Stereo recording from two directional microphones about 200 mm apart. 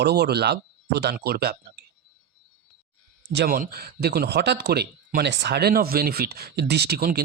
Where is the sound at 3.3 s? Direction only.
50° right (ahead or behind).